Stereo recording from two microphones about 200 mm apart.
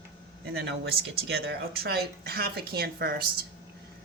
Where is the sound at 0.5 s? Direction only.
55° right (ahead or behind).